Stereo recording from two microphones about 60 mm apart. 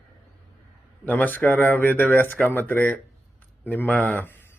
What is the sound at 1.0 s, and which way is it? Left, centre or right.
A man's voice, left.